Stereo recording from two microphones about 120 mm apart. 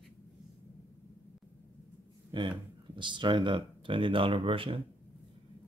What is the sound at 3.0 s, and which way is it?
Speech, 40° right (ahead or behind).